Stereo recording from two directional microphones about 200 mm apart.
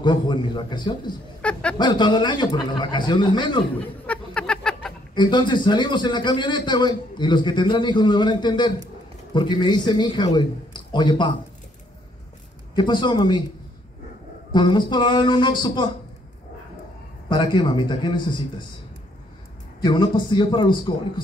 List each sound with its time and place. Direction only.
0.0 s a man's voice: 25° left (ahead or behind)
1.4 s a sound: 5° left (ahead or behind)
1.8 s a man's voice: 20° left (ahead or behind)
4.0 s a sound: 5° left (ahead or behind)
5.1 s a man's voice: 25° left (ahead or behind)
12.7 s a man's voice: 20° left (ahead or behind)
14.5 s a man's voice: 20° left (ahead or behind)
17.3 s a man's voice: 25° left (ahead or behind)
19.8 s a man's voice: 20° left (ahead or behind)